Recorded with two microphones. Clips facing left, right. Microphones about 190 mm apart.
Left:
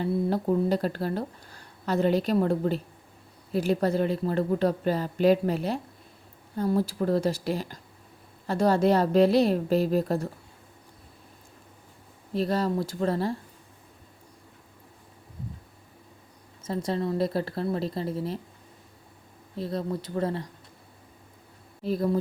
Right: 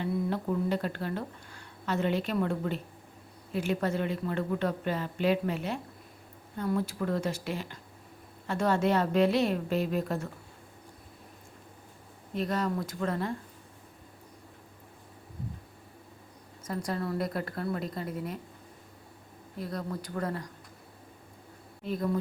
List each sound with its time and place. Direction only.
0.0 s speech: 35° left (ahead or behind)
12.3 s speech: 35° left (ahead or behind)
16.6 s a woman's voice: 25° left (ahead or behind)
19.5 s a woman's voice: 25° left (ahead or behind)
21.8 s speech: 35° left (ahead or behind)